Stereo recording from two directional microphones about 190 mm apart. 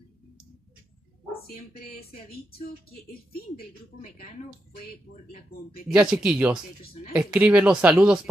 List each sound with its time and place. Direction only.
1.3 s speech: 50° left (ahead or behind)
5.9 s speech: 5° right (ahead or behind)